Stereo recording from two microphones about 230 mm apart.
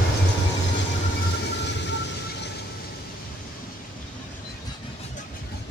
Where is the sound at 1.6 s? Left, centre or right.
Left.